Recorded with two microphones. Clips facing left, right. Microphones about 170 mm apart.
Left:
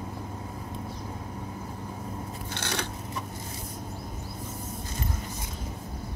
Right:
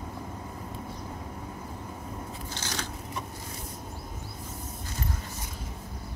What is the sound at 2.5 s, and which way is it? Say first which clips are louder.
Scissors: left 4 dB; 60° left (ahead or behind).